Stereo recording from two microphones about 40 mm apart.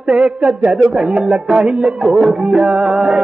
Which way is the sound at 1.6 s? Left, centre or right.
Right.